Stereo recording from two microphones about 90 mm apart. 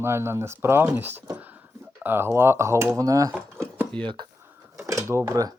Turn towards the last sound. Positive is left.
turn(degrees=-30)  # may be behind; listen again after turning